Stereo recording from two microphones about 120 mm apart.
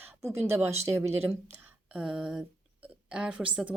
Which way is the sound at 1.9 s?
5° right (ahead or behind).